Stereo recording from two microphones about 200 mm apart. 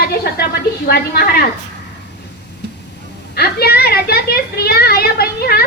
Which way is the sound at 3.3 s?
55° left (ahead or behind).